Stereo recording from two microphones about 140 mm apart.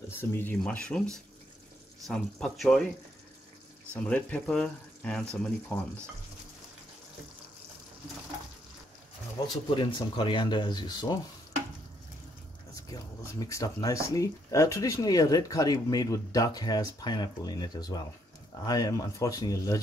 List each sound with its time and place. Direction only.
0.1 s speech: 15° left (ahead or behind)
2.0 s speech: 5° left (ahead or behind)
3.9 s speech: 10° left (ahead or behind)
9.8 s speech: 35° left (ahead or behind)
12.9 s speech: 25° left (ahead or behind)